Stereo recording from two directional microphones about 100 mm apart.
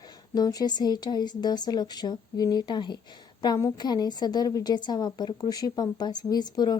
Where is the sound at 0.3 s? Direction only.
40° left (ahead or behind).